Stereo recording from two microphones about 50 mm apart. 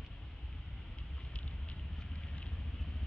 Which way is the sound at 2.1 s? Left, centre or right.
Left.